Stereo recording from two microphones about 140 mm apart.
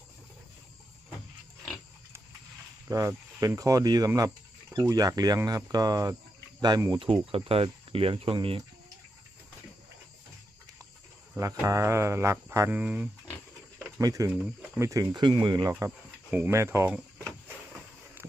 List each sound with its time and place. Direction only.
2.9 s speech: 25° right (ahead or behind)
7.0 s speech: 40° right (ahead or behind)
11.3 s speech: 20° right (ahead or behind)
14.0 s speech: 25° right (ahead or behind)
16.3 s speech: 15° right (ahead or behind)